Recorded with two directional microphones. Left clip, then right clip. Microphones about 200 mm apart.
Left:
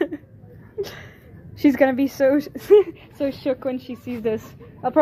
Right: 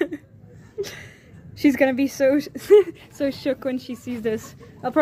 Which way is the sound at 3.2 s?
35° right (ahead or behind).